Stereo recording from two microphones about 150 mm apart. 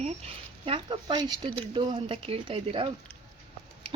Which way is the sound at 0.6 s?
35° right (ahead or behind).